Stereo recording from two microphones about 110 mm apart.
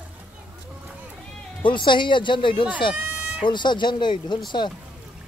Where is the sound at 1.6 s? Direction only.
45° left (ahead or behind).